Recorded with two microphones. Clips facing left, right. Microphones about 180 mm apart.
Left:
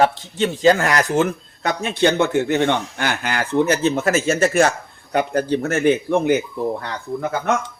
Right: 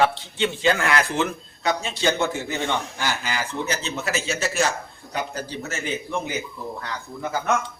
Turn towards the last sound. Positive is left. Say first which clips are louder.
# left 5 dB
turn(degrees=60)  # may be behind; listen again after turning